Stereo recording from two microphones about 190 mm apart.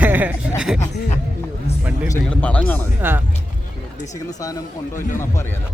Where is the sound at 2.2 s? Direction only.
5° left (ahead or behind).